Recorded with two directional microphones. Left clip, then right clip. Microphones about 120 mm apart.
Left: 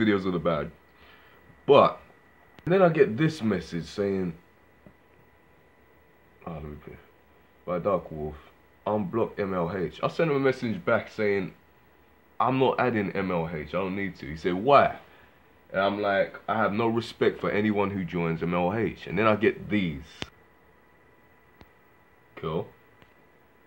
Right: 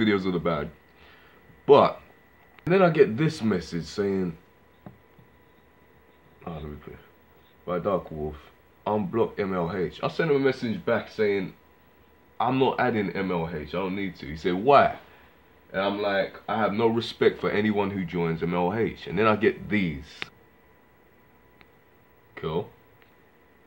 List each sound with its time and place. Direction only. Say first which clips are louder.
0.0 s speech: right 1 dB; 20° left (ahead or behind)
1.7 s speech: right 1 dB; 15° left (ahead or behind)
6.4 s speech: right 1 dB; 10° left (ahead or behind); by 11.5 s 45° left (ahead or behind)
12.4 s speech: even; 35° left (ahead or behind); by 14.2 s 50° left (ahead or behind)
14.2 s speech: right 2 dB; 30° left (ahead or behind)
14.6 s speech: right 1 dB; 15° left (ahead or behind)
15.7 s speech: left 1 dB; 50° left (ahead or behind)
16.9 s speech: right 3 dB; 30° left (ahead or behind)
22.3 s speech: right 2 dB; 20° left (ahead or behind)